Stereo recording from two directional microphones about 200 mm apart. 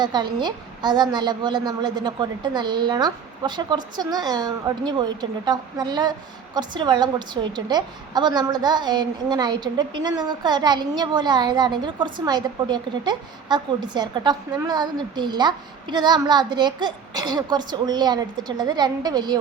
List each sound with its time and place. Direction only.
0.0 s a woman's voice: 20° right (ahead or behind)